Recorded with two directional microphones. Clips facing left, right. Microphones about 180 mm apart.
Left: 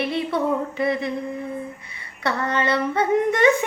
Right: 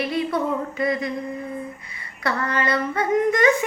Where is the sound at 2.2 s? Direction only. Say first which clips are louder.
Left 1 dB; 25° left (ahead or behind).